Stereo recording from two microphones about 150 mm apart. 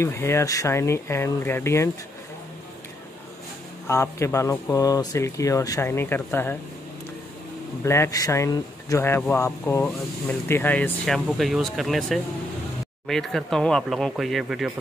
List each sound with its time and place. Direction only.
0.0 s speech: 15° left (ahead or behind)
3.8 s speech: 20° left (ahead or behind)
7.8 s speech: 20° left (ahead or behind); by 14.7 s centre (ahead or behind)